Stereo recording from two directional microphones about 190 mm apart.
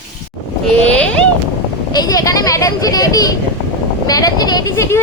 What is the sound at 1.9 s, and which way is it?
Speech, 20° left (ahead or behind).